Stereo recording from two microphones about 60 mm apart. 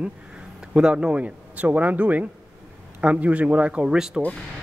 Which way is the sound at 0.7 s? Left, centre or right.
Centre.